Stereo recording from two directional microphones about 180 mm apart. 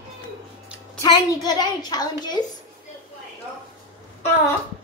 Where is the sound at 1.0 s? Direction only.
25° left (ahead or behind).